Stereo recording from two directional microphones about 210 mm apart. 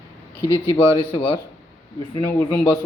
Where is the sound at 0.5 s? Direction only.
25° left (ahead or behind).